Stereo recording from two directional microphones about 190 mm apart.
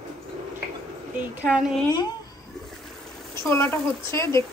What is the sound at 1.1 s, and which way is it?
Speech, 5° right (ahead or behind).